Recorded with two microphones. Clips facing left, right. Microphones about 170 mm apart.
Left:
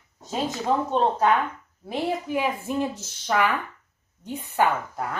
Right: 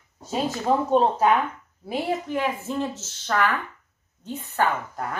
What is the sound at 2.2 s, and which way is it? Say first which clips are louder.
A woman's voice: even; 10° left (ahead or behind).